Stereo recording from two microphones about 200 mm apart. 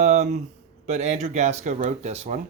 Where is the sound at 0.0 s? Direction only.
35° right (ahead or behind).